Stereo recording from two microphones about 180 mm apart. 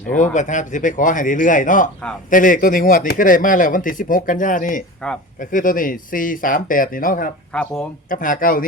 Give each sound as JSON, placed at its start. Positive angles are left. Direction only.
{"t": 0.3, "sound": "speech", "side_deg": 45}
{"t": 7.5, "sound": "speech", "side_deg": 5}
{"t": 8.1, "sound": "speech", "side_deg": 50}